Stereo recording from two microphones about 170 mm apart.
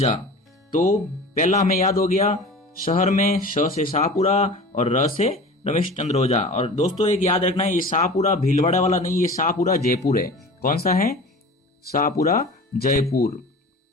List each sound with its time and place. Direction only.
0.7 s speech: 50° left (ahead or behind)
8.6 s speech: 40° left (ahead or behind)
13.0 s speech: 20° left (ahead or behind)